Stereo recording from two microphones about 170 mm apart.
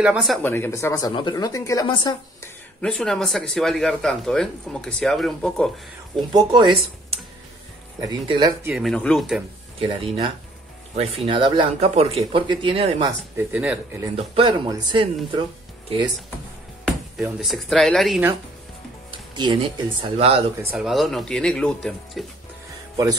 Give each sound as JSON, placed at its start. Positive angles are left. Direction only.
{"t": 0.0, "sound": "speech", "side_deg": -5}
{"t": 0.4, "sound": "speech", "side_deg": 15}
{"t": 2.8, "sound": "speech", "side_deg": 5}
{"t": 6.3, "sound": "speech", "side_deg": -25}
{"t": 8.6, "sound": "speech", "side_deg": 0}
{"t": 9.8, "sound": "speech", "side_deg": -35}
{"t": 13.4, "sound": "speech", "side_deg": -10}
{"t": 14.1, "sound": "speech", "side_deg": -35}
{"t": 16.8, "sound": "speech", "side_deg": 0}
{"t": 19.3, "sound": "speech", "side_deg": -30}
{"t": 20.7, "sound": "speech", "side_deg": 0}